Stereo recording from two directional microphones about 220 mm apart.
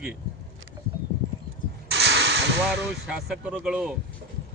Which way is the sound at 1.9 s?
50° right (ahead or behind).